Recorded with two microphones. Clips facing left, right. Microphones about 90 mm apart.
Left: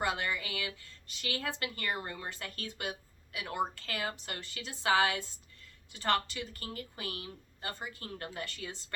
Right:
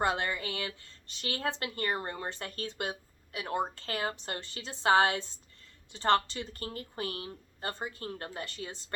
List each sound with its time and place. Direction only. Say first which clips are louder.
0.0 s speech: right 3 dB; 35° right (ahead or behind)